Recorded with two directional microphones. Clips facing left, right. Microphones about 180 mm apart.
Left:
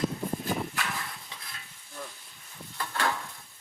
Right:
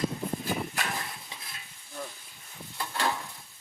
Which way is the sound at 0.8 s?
40° right (ahead or behind).